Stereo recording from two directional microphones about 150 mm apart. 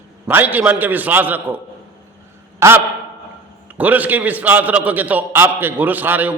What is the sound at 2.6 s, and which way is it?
Speech, 20° right (ahead or behind).